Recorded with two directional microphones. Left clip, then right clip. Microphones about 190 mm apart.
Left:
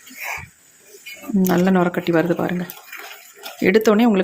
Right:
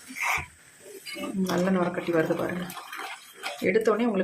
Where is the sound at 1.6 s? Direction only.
55° left (ahead or behind).